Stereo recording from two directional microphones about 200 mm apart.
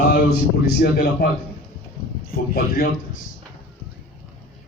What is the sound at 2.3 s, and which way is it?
Speech, 45° left (ahead or behind).